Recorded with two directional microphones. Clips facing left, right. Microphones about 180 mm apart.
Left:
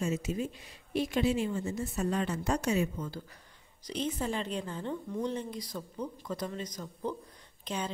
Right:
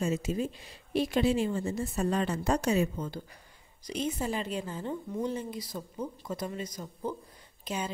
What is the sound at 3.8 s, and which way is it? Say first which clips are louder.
A woman's voice: right 1 dB; 10° right (ahead or behind).